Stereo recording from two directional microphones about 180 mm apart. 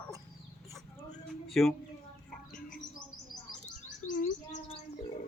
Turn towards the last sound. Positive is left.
turn(degrees=40)  # may be behind; listen again after turning